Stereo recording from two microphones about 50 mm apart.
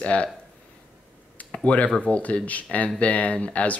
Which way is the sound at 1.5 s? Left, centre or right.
Left.